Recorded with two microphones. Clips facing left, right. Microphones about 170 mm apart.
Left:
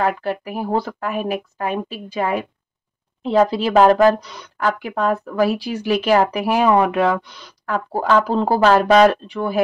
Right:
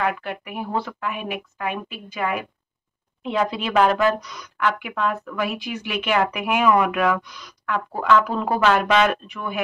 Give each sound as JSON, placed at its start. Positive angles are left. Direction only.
{"t": 0.0, "sound": "speech", "side_deg": 35}